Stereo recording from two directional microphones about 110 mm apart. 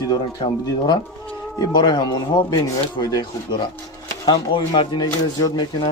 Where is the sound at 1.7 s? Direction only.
45° left (ahead or behind).